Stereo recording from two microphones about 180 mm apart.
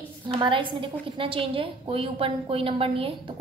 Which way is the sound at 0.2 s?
25° right (ahead or behind).